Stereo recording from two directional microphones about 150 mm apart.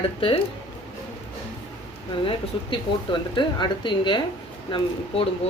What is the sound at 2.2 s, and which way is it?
Speech, 35° left (ahead or behind).